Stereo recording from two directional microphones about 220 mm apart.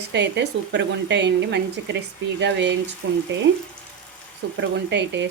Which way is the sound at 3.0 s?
65° right (ahead or behind).